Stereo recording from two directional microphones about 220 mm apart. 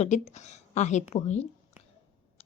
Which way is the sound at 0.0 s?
30° left (ahead or behind).